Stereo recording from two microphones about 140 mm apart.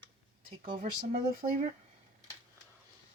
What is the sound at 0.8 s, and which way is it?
Speech, 85° right.